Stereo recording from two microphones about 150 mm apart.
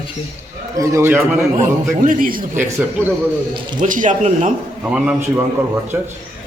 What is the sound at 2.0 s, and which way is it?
Speech, 65° right (ahead or behind).